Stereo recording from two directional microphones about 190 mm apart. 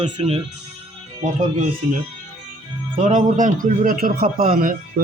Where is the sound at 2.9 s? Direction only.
40° right (ahead or behind).